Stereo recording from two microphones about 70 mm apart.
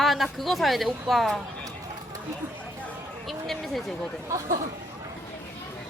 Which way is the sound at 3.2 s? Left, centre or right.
Centre.